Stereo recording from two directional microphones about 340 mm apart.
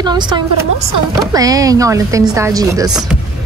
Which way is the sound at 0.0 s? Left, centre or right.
Centre.